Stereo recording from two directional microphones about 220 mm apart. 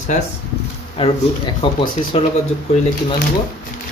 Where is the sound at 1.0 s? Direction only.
25° left (ahead or behind).